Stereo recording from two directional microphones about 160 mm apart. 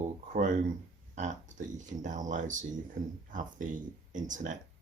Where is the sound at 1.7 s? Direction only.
50° right (ahead or behind).